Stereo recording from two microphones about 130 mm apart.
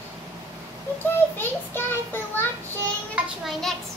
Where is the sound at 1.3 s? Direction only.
15° left (ahead or behind).